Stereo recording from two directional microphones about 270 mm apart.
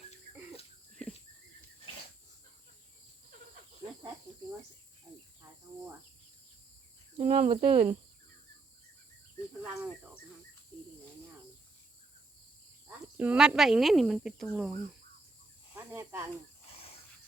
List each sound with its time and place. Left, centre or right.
7.2 s speech: right
9.7 s cricket: centre
13.1 s speech: centre
15.9 s speech: centre